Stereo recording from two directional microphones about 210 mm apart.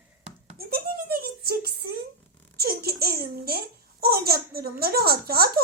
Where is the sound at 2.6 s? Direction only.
45° right (ahead or behind).